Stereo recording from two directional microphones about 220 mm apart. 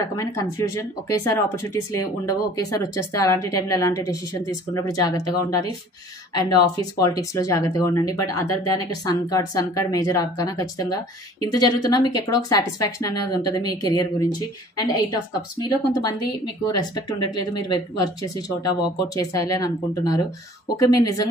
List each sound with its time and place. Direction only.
0.1 s speech: 15° left (ahead or behind)
15.6 s speech: 20° left (ahead or behind)